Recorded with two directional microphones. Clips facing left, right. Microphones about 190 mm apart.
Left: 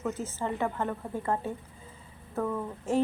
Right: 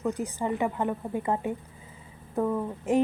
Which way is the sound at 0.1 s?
15° right (ahead or behind).